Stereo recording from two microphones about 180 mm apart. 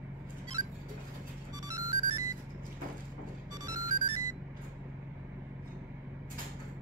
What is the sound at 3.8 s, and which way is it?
Music, 20° right (ahead or behind).